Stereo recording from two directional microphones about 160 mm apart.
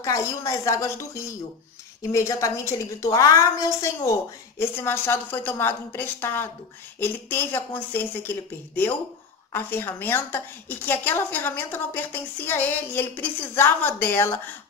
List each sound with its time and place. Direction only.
0.0 s a woman's voice: 20° left (ahead or behind)